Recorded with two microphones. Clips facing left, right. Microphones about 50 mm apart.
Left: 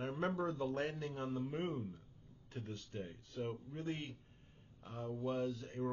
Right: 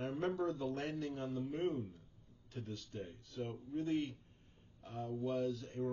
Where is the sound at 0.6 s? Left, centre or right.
Centre.